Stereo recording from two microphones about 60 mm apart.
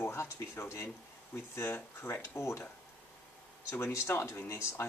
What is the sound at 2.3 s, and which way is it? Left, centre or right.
Speech, left.